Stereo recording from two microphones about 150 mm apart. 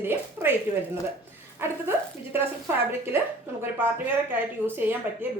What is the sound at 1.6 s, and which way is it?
A woman's voice, 15° right (ahead or behind).